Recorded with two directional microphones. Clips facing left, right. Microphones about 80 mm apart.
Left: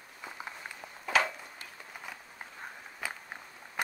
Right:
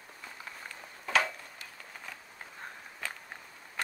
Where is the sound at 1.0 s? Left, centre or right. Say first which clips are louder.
Left 1 dB; centre.